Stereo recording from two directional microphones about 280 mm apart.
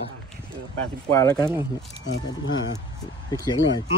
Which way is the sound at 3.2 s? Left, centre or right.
Centre.